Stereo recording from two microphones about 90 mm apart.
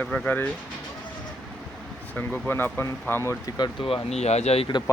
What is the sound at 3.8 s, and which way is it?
Speech, 75° left (ahead or behind).